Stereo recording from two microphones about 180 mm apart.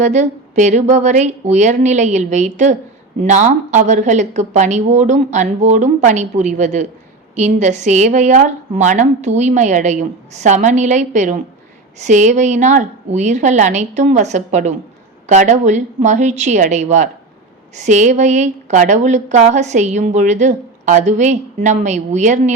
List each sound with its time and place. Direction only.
0.0 s a woman's voice: 40° right (ahead or behind)